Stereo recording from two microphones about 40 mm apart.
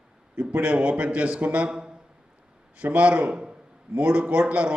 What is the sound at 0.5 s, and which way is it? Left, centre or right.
A man's voice, right.